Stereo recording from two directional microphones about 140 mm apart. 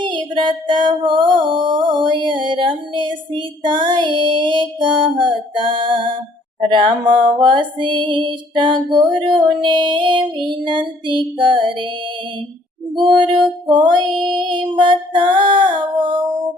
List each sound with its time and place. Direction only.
0.0 s female singing: 35° right (ahead or behind)
6.6 s music: 35° right (ahead or behind)
13.0 s music: 35° right (ahead or behind)